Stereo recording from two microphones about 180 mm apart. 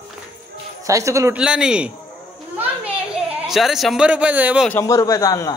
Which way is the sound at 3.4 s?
Centre (ahead or behind).